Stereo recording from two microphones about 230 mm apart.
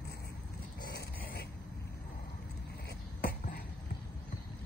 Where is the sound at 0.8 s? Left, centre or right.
Left.